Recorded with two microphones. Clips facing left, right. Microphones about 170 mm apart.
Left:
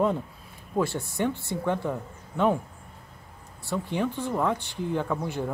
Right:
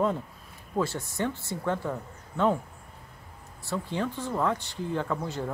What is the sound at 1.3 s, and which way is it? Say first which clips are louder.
Speech: left 4 dB; 60° left (ahead or behind).